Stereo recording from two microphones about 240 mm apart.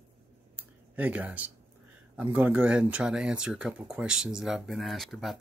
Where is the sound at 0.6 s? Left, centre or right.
Centre.